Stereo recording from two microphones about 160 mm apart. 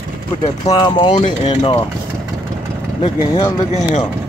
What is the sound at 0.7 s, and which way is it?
Speech, 25° left (ahead or behind).